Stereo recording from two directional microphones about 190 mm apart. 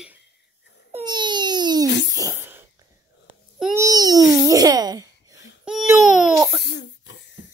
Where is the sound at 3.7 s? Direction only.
20° right (ahead or behind).